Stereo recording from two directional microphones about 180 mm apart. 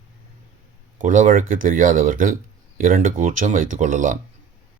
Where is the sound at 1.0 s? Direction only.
45° right (ahead or behind).